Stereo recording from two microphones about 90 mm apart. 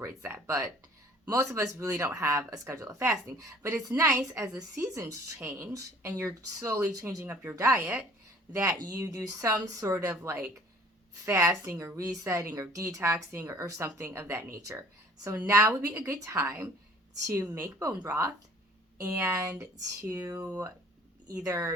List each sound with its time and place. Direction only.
0.2 s a woman's voice: 30° right (ahead or behind)
20.3 s a woman's voice: 20° right (ahead or behind)
21.2 s a woman's voice: 35° right (ahead or behind)